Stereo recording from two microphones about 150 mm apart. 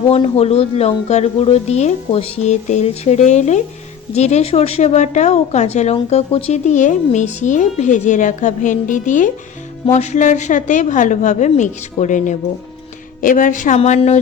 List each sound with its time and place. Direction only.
0.1 s a woman's voice: 40° left (ahead or behind)